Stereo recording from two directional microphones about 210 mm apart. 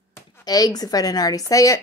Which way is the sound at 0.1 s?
15° left (ahead or behind).